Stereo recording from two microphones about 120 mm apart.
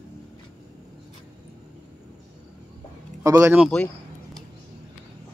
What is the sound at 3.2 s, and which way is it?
Speech, 25° right (ahead or behind).